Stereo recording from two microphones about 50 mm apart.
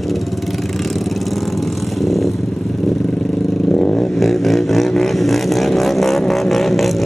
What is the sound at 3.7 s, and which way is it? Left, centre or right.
Vehicle, centre.